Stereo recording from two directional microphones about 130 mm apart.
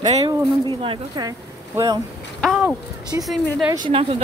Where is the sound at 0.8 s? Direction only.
35° right (ahead or behind).